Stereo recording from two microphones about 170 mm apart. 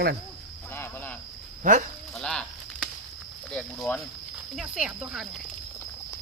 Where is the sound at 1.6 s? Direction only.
50° right (ahead or behind).